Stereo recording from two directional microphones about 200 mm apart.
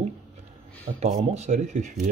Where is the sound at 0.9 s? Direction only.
35° right (ahead or behind).